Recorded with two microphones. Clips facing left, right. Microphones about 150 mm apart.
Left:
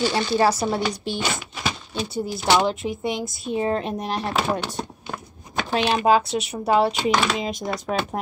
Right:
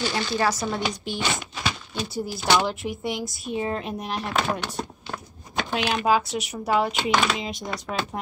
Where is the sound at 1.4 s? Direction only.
10° left (ahead or behind).